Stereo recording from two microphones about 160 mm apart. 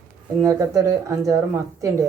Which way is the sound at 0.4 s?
20° right (ahead or behind).